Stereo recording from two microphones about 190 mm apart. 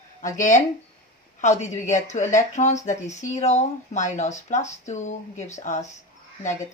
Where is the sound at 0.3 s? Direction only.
40° left (ahead or behind).